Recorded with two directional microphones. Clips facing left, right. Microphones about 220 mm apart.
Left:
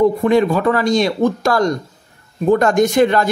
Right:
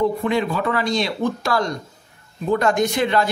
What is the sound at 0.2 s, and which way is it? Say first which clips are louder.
Speech: left 7 dB; 45° left (ahead or behind).